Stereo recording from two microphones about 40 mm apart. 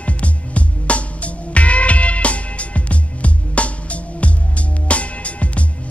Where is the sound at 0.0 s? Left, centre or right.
Left.